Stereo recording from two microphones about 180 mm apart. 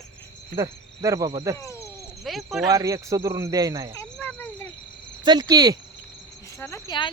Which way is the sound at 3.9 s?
15° left (ahead or behind).